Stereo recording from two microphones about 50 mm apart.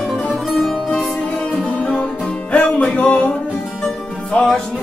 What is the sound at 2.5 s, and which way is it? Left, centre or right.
Music, left.